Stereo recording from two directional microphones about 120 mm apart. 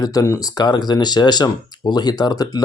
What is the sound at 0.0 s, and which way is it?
Speech, 30° left (ahead or behind).